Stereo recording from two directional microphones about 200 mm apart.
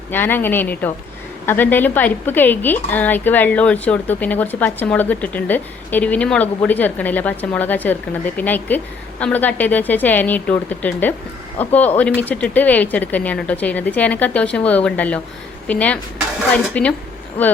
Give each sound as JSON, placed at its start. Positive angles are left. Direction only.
{"t": 0.1, "sound": "a woman's voice", "side_deg": 10}